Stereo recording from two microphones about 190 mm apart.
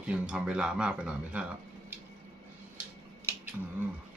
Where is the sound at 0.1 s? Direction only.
5° right (ahead or behind).